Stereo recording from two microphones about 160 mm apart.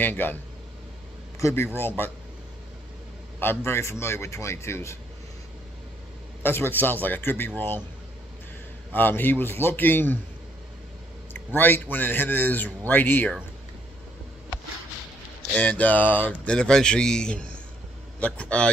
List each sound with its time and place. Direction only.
0.0 s a man's voice: 10° left (ahead or behind)
1.4 s a man's voice: 15° left (ahead or behind)
3.3 s a man's voice: 15° left (ahead or behind)
6.4 s a man's voice: 15° left (ahead or behind)
8.9 s a man's voice: 10° left (ahead or behind)
11.3 s a man's voice: 10° left (ahead or behind)
15.5 s a man's voice: 5° left (ahead or behind)